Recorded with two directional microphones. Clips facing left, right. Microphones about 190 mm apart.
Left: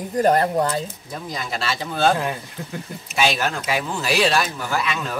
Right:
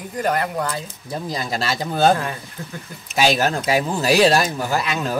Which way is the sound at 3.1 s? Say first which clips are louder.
Right 3 dB; 40° right (ahead or behind).